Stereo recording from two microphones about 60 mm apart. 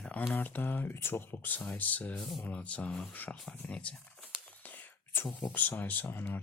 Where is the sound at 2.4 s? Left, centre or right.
Left.